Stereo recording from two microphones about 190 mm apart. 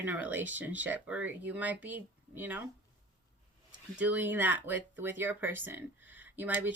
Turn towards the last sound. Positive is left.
turn(degrees=-10)  # may be behind; listen again after turning